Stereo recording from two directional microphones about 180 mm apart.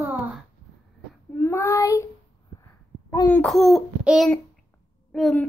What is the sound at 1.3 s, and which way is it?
Child singing, 10° left (ahead or behind).